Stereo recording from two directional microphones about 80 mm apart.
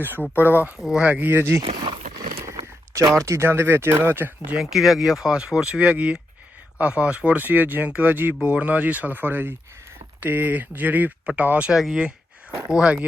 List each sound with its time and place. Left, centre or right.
0.0 s speech: right
0.8 s speech: centre
3.2 s speech: right
4.5 s speech: centre
11.7 s speech: centre